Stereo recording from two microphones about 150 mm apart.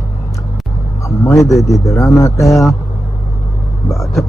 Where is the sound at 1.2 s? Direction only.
20° left (ahead or behind).